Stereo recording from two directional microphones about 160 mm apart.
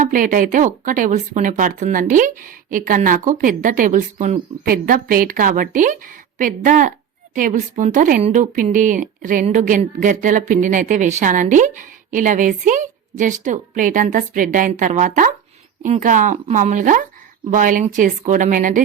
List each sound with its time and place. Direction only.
0.0 s speech: 55° right (ahead or behind)